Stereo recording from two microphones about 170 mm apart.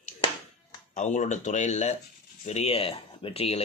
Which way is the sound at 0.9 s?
45° left (ahead or behind).